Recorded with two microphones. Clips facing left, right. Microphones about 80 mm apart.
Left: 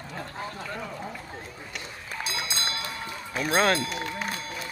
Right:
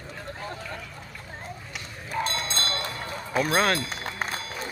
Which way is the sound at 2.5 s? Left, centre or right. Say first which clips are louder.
Right 2 dB; centre.